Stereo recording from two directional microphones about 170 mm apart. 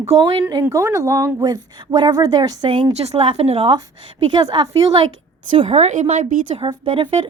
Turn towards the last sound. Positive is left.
turn(degrees=-30)  # may be behind; listen again after turning